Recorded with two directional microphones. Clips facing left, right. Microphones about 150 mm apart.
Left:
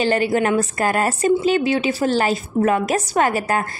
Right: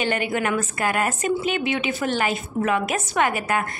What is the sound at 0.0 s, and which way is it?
A woman's voice, 35° left (ahead or behind).